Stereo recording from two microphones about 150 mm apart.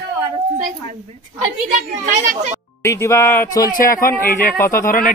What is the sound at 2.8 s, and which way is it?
Speech, 20° left (ahead or behind).